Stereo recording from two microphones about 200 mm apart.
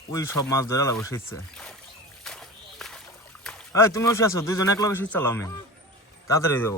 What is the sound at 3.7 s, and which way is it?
Speech, 15° left (ahead or behind).